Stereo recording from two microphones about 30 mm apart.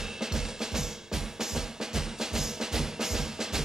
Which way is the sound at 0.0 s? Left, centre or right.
Centre.